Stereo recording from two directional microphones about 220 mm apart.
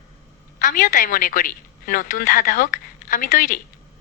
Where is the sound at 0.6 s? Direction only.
35° left (ahead or behind).